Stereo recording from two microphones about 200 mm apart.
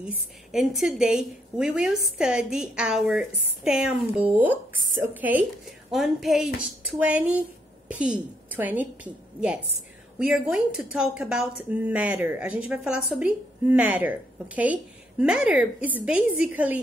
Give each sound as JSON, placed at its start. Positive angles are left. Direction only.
{"t": 0.0, "sound": "a woman's voice", "side_deg": -5}